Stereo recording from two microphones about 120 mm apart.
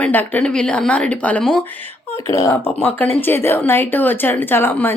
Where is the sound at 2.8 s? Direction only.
15° left (ahead or behind).